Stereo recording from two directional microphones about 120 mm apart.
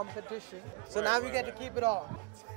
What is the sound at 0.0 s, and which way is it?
Speech, 25° right (ahead or behind).